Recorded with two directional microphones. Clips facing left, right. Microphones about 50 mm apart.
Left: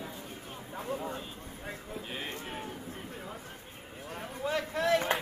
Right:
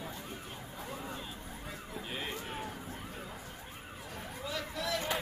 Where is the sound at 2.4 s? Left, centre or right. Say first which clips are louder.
Left 1 dB; centre.